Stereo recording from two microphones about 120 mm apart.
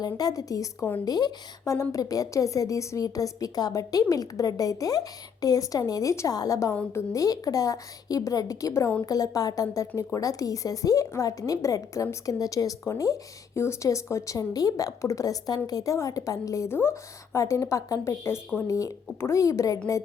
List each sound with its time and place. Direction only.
0.0 s speech: 30° left (ahead or behind)